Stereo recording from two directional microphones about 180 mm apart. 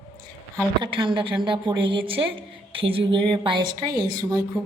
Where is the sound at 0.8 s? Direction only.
30° right (ahead or behind).